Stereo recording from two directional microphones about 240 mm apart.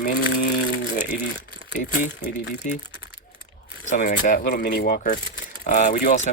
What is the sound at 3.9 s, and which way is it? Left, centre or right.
Speech, left.